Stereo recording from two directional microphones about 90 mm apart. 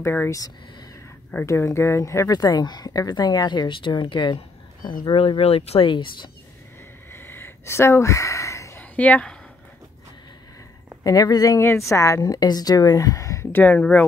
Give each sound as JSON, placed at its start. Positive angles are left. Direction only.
{"t": 0.0, "sound": "speech", "side_deg": 25}
{"t": 1.4, "sound": "speech", "side_deg": 35}
{"t": 5.1, "sound": "speech", "side_deg": 90}
{"t": 7.1, "sound": "a sound", "side_deg": 25}
{"t": 8.9, "sound": "speech", "side_deg": 15}
{"t": 11.1, "sound": "speech", "side_deg": 45}
{"t": 11.6, "sound": "a woman's voice", "side_deg": 30}
{"t": 13.5, "sound": "speech", "side_deg": 20}